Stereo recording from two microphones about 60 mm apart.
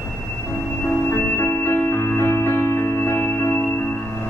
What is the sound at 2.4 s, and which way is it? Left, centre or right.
Music, left.